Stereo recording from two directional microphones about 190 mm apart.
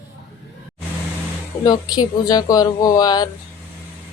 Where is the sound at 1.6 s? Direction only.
20° left (ahead or behind).